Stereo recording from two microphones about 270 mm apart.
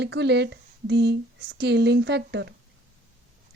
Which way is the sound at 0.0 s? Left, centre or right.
Right.